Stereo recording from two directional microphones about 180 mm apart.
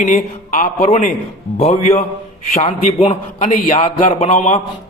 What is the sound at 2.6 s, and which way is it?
A man's voice, 35° left (ahead or behind).